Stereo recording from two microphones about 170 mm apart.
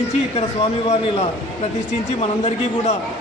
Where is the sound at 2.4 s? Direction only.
40° left (ahead or behind).